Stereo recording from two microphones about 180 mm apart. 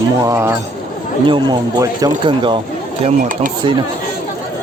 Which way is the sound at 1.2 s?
25° right (ahead or behind).